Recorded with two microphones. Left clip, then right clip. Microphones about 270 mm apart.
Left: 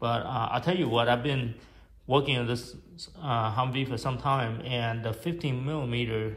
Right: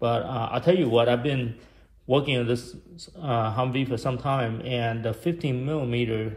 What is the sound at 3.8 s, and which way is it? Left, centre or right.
A man's voice, left.